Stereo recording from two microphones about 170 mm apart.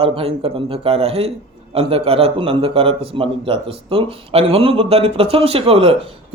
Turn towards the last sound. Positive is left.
turn(degrees=-35)  # may be behind; listen again after turning